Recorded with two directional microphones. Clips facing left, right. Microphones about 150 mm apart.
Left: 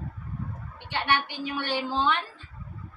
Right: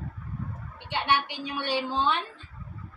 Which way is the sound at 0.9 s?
20° right (ahead or behind).